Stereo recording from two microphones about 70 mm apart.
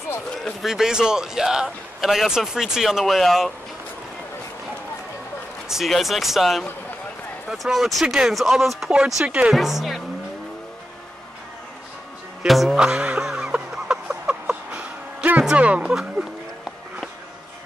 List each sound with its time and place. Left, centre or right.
0.4 s a man's voice: centre
5.7 s speech: centre
9.2 s a man's voice: centre
9.5 s speech: centre
12.4 s speech: centre
12.7 s a sound: centre
15.4 s speech: centre
15.9 s a sound: centre